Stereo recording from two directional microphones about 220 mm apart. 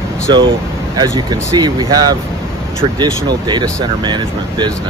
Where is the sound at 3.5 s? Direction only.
20° right (ahead or behind).